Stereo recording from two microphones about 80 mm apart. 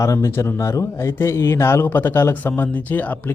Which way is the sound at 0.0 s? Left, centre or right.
Left.